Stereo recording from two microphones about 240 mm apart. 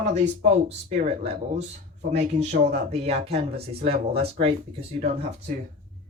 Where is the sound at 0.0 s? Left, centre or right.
Right.